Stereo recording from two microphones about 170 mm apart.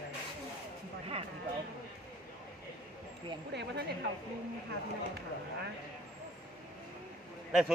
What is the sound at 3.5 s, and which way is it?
Speech, 80° right.